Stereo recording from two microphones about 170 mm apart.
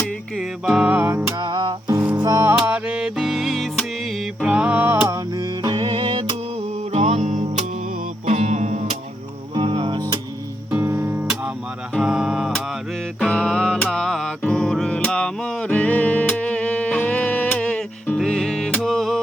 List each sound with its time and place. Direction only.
0.0 s music: centre (ahead or behind)
1.4 s music: 25° right (ahead or behind); by 9.0 s 45° right (ahead or behind)
9.6 s music: 30° right (ahead or behind)
10.7 s music: 10° right (ahead or behind)